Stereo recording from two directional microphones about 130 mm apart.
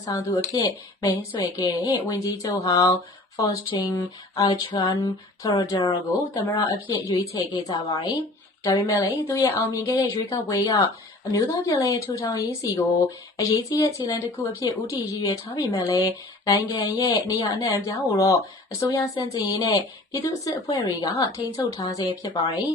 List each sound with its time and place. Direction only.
0.2 s speech: 20° left (ahead or behind)